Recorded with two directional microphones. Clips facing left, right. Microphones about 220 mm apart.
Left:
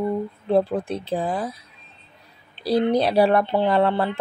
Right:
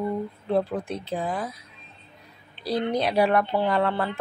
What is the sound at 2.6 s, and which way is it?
Speech, 30° left (ahead or behind).